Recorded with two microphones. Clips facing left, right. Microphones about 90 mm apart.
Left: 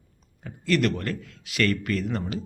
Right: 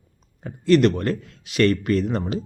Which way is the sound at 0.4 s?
30° right (ahead or behind).